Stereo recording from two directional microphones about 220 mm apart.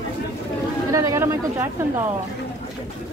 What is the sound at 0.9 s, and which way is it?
Speech, 15° right (ahead or behind).